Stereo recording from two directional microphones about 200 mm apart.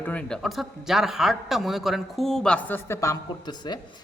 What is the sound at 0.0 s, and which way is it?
A man's voice, 5° left (ahead or behind).